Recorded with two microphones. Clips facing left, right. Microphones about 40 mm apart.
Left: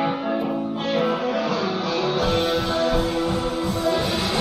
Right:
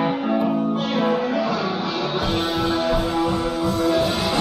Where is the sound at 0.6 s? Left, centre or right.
Right.